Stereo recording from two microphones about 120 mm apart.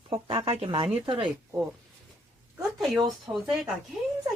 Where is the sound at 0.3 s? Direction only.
50° right (ahead or behind).